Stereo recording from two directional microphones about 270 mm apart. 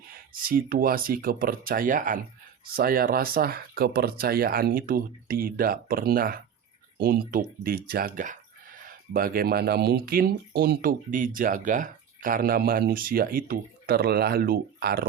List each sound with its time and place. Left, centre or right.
0.1 s speech: right